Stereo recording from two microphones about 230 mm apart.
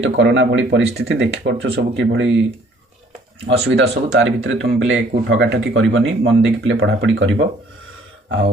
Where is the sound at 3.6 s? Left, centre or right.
Right.